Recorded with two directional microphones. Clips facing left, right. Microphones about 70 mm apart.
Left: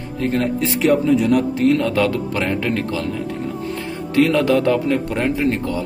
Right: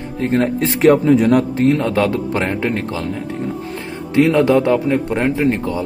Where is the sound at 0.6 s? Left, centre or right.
Right.